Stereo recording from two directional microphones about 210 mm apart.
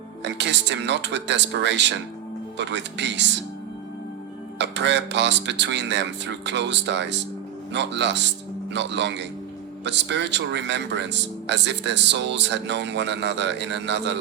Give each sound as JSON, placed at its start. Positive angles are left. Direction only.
{"t": 0.3, "sound": "speech", "side_deg": -55}
{"t": 4.5, "sound": "speech", "side_deg": -55}